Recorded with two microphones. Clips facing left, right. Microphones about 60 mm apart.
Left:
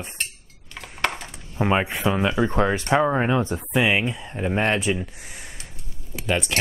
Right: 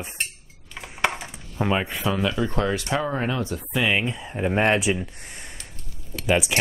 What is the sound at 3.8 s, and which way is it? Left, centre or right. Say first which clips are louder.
Speech: left 2 dB; centre.